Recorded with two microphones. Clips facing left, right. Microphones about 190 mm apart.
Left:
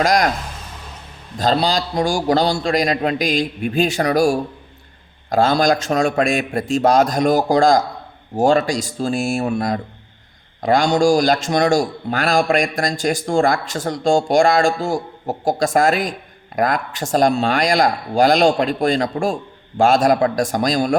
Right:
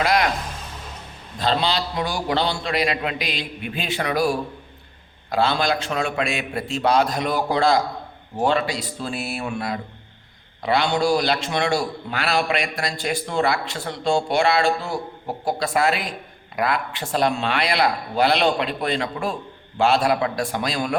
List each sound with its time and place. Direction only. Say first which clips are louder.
0.0 s speech: left 4 dB; 40° left (ahead or behind)
1.4 s speech: left 4 dB; 40° left (ahead or behind)